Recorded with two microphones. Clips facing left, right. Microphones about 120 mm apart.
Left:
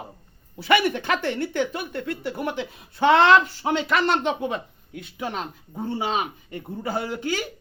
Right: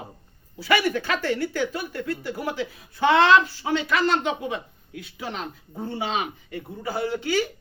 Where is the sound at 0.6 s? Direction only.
25° left (ahead or behind).